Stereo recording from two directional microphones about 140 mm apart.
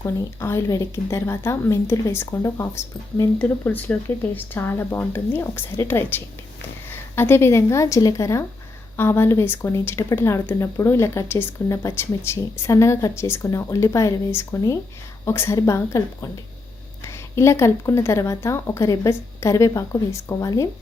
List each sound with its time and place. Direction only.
0.0 s speech: 20° left (ahead or behind)